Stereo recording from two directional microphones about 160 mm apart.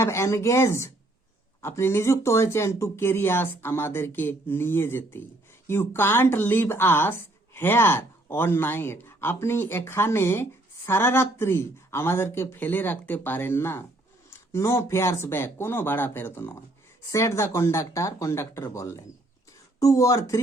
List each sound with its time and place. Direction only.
0.0 s speech: 15° left (ahead or behind)